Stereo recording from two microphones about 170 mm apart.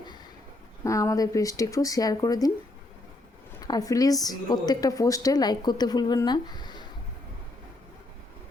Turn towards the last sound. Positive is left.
turn(degrees=25)  # may be behind; listen again after turning